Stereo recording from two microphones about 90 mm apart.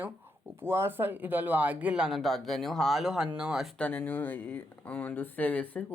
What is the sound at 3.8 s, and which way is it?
Speech, 15° left (ahead or behind).